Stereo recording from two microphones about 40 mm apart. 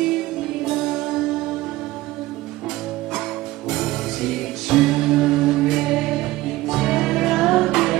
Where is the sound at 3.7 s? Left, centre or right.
Centre.